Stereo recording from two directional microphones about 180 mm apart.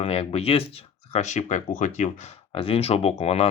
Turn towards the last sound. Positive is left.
turn(degrees=35)  # may be behind; listen again after turning